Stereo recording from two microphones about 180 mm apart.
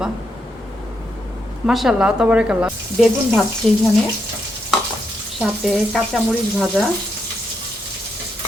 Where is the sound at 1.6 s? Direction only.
Centre (ahead or behind).